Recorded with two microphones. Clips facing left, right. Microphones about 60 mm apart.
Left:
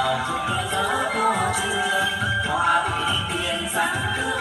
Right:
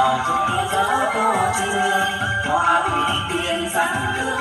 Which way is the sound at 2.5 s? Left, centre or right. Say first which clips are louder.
Right 4 dB; centre.